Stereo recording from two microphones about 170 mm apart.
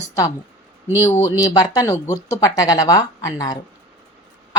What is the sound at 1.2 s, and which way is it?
Speech, 20° left (ahead or behind).